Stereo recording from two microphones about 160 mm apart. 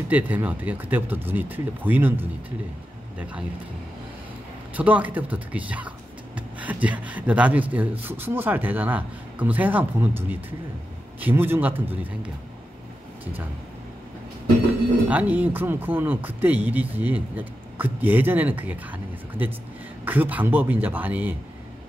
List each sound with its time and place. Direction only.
0.1 s speech: 10° right (ahead or behind)
4.7 s speech: 10° right (ahead or behind)
15.0 s speech: 10° right (ahead or behind)